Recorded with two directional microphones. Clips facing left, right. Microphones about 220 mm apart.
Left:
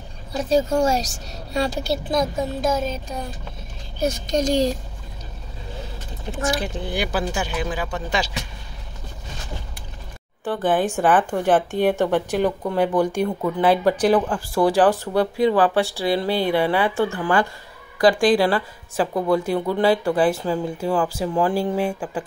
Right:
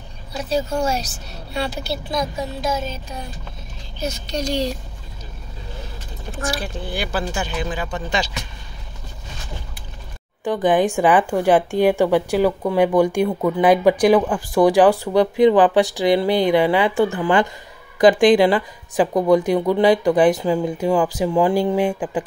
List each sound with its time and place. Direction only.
0.3 s speech: 45° left (ahead or behind)
4.0 s speech: 50° left (ahead or behind)
6.3 s speech: 20° left (ahead or behind)
10.4 s a woman's voice: 15° right (ahead or behind)